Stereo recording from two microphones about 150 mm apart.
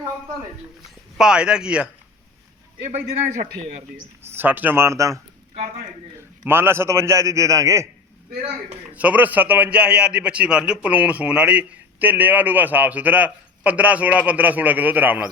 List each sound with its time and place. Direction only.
0.9 s speech: 5° right (ahead or behind)
4.4 s a man's voice: 10° right (ahead or behind)
6.4 s a man's voice: 15° right (ahead or behind)
8.9 s a man's voice: 10° right (ahead or behind)